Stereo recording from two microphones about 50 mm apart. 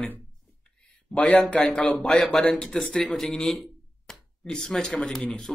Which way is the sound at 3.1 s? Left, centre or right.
Centre.